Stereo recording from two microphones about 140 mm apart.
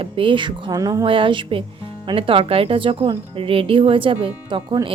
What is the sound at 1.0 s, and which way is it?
Speech, 40° right (ahead or behind).